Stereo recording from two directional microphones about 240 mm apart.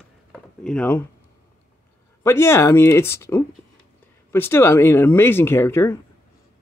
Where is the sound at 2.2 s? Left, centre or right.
Centre.